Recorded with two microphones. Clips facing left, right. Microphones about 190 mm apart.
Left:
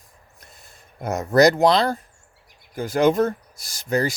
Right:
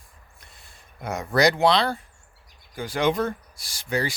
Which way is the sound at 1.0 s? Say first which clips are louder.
Left 5 dB; 45° left (ahead or behind).